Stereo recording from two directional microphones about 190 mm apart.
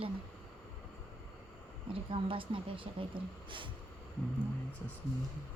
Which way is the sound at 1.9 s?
30° right (ahead or behind).